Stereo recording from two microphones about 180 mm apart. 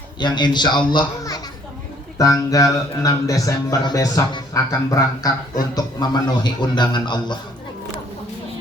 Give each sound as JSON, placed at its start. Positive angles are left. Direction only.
{"t": 0.2, "sound": "speech", "side_deg": 25}